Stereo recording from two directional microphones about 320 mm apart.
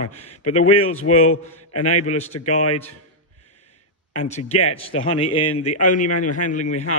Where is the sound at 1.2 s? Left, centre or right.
Left.